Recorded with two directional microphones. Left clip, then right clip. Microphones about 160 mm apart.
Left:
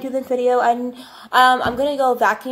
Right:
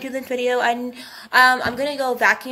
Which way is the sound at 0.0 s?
20° right (ahead or behind).